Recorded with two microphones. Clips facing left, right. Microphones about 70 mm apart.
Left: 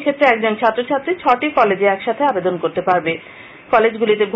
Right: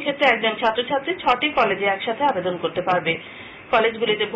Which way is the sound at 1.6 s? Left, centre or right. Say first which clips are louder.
Left 6 dB; centre.